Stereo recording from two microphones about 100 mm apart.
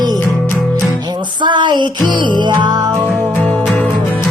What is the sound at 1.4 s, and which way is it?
Music, 50° right (ahead or behind).